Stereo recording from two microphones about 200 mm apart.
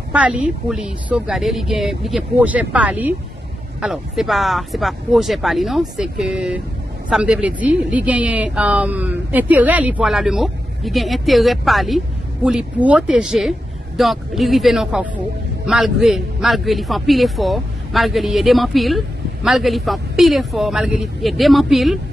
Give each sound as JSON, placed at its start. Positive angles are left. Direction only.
{"t": 0.1, "sound": "a man's voice", "side_deg": -5}